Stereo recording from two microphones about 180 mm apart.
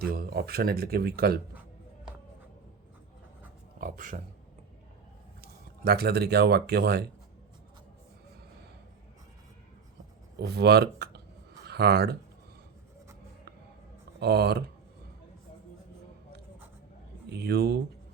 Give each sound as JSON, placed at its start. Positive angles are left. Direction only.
{"t": 0.1, "sound": "speech", "side_deg": -60}
{"t": 3.8, "sound": "speech", "side_deg": -50}
{"t": 5.4, "sound": "speech", "side_deg": -60}
{"t": 10.3, "sound": "speech", "side_deg": -65}
{"t": 14.2, "sound": "speech", "side_deg": -65}
{"t": 17.2, "sound": "speech", "side_deg": -65}